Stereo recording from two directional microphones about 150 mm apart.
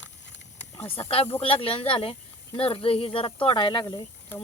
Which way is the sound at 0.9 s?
40° left (ahead or behind).